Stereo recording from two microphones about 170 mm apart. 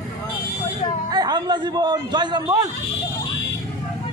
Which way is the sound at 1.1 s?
25° right (ahead or behind).